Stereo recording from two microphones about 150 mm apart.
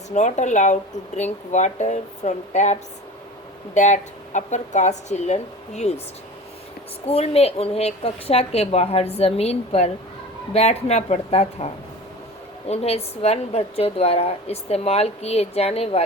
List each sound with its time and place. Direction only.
0.1 s a woman's voice: 50° left (ahead or behind)
3.8 s a woman's voice: 55° left (ahead or behind)
7.1 s a woman's voice: 45° left (ahead or behind)